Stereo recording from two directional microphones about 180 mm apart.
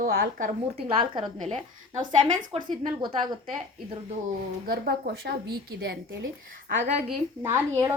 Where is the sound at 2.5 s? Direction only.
35° right (ahead or behind).